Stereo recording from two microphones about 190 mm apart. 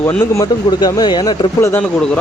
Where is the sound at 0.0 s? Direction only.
10° left (ahead or behind).